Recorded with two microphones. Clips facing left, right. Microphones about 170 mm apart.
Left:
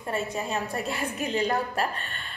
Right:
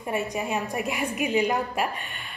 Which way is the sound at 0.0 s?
15° right (ahead or behind).